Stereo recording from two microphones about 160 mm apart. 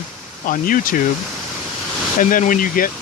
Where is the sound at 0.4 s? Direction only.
60° left (ahead or behind).